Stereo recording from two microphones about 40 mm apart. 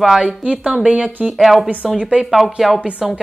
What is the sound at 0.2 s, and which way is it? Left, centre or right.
Speech, right.